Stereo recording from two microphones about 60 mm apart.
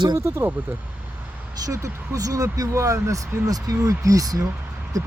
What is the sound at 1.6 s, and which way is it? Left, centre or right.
Speech, right.